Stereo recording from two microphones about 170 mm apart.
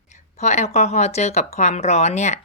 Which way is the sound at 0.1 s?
40° left (ahead or behind).